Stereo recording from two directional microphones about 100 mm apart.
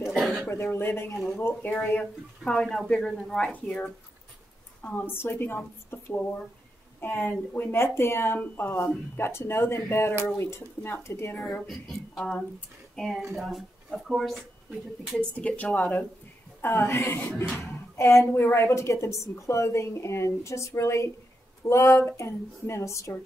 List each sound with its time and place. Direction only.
0.1 s a sound: 5° left (ahead or behind)
0.5 s a woman's voice: 25° left (ahead or behind)
1.8 s speech: 10° left (ahead or behind)
4.8 s a woman's voice: 20° left (ahead or behind)
11.6 s speech: centre (ahead or behind)
15.1 s a woman's voice: 15° left (ahead or behind); by 23.1 s 30° left (ahead or behind)